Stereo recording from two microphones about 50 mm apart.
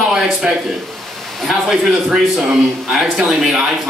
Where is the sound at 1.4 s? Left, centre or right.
Centre.